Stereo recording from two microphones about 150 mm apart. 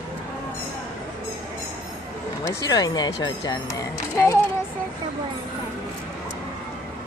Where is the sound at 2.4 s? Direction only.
25° left (ahead or behind).